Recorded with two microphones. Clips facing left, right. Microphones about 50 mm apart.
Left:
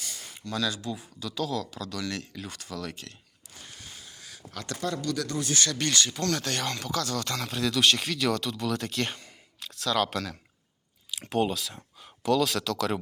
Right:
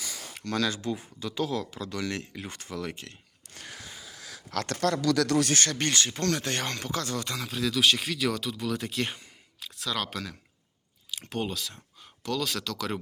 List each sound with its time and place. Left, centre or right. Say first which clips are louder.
0.5 s speech: right 2 dB; right
4.6 s speech: right 4 dB; right
5.5 s speech: right 1 dB; right
7.3 s speech: left 1 dB; centre